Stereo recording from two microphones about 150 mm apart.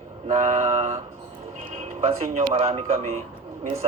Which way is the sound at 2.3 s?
45° right (ahead or behind).